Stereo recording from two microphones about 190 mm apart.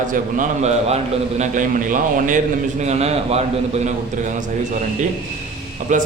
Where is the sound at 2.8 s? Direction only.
35° right (ahead or behind).